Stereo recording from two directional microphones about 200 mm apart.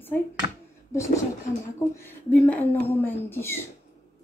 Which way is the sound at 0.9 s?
15° left (ahead or behind).